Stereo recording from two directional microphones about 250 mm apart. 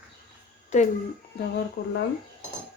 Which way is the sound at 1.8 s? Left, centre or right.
Left.